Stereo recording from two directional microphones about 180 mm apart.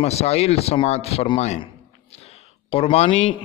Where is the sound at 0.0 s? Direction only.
35° left (ahead or behind).